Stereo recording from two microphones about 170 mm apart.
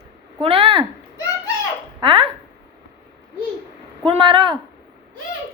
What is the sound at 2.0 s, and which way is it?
Speech, 30° right (ahead or behind).